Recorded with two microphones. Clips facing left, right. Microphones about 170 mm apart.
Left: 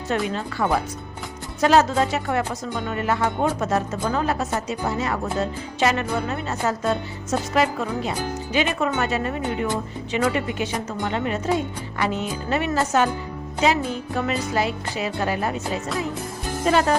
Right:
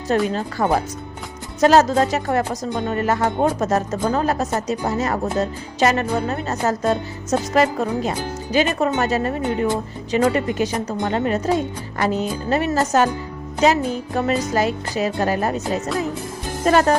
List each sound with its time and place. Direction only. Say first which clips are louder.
0.3 s speech: right 3 dB; 40° right (ahead or behind)